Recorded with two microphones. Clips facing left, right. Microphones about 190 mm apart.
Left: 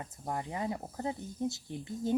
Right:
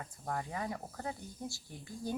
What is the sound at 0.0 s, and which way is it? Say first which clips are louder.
Speech: left 2 dB; 20° left (ahead or behind).